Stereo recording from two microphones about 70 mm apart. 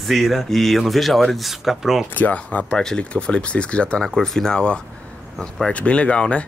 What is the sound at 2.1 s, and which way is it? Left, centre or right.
Speech, left.